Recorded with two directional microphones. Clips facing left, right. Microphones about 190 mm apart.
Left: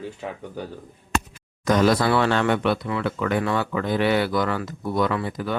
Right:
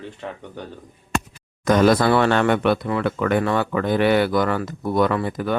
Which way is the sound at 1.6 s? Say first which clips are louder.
Right 3 dB; 55° right (ahead or behind).